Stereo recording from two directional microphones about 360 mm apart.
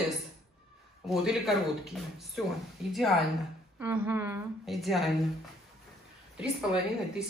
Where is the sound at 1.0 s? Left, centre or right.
Centre.